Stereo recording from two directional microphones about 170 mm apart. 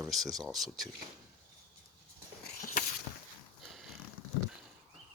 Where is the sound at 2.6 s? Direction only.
50° left (ahead or behind).